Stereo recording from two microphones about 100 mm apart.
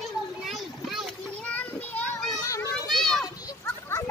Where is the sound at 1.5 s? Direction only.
15° left (ahead or behind).